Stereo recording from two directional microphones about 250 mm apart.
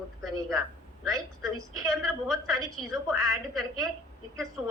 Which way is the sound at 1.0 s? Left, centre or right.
Centre.